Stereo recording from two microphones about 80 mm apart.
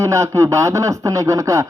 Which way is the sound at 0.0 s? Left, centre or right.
Right.